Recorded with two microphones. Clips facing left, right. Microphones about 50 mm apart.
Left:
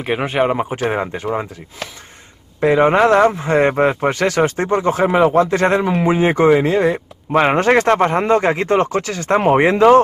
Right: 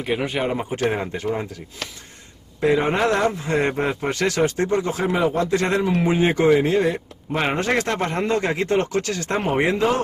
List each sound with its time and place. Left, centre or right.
0.0 s speech: left
5.8 s speech: left